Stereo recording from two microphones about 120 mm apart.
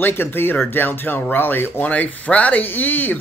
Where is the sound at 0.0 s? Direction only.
20° left (ahead or behind).